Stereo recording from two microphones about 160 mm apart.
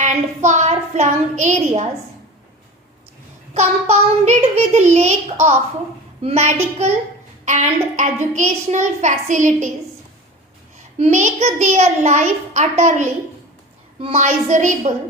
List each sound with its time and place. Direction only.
0.0 s a woman's voice: 50° right (ahead or behind)
3.5 s a child's voice: 40° right (ahead or behind)
10.9 s a child's voice: 45° right (ahead or behind)